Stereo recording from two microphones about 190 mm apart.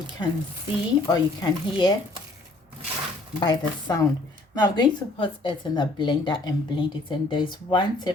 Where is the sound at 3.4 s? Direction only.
25° left (ahead or behind).